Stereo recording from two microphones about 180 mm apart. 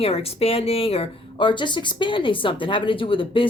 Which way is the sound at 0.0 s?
35° left (ahead or behind).